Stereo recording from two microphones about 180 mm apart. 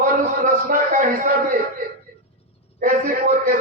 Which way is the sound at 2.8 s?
50° right (ahead or behind).